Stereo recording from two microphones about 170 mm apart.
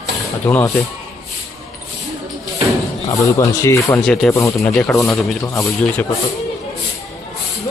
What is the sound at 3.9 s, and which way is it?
Speech, 5° left (ahead or behind).